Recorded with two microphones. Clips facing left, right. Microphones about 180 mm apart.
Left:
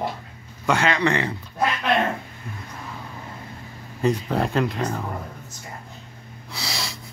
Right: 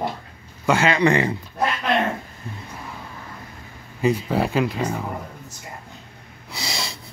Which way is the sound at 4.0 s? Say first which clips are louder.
Right 1 dB; 5° right (ahead or behind).